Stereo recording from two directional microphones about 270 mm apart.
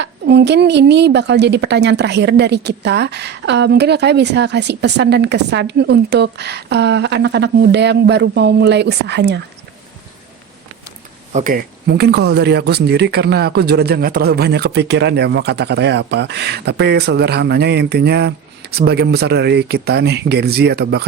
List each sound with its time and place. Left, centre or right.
0.0 s speech: right
11.3 s speech: right